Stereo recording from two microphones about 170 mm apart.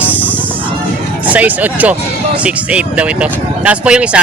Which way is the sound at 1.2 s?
10° right (ahead or behind).